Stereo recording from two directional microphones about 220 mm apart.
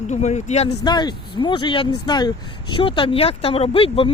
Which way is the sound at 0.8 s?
20° left (ahead or behind).